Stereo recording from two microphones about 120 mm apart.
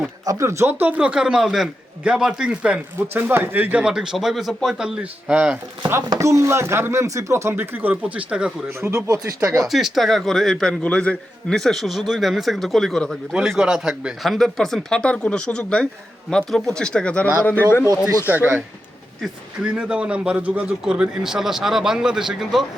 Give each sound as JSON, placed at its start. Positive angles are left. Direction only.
{"t": 0.3, "sound": "a man's voice", "side_deg": -25}
{"t": 6.1, "sound": "speech", "side_deg": -25}
{"t": 9.0, "sound": "speech", "side_deg": -25}
{"t": 9.5, "sound": "a man's voice", "side_deg": -5}
{"t": 18.3, "sound": "a man's voice", "side_deg": -15}
{"t": 19.7, "sound": "a man's voice", "side_deg": -10}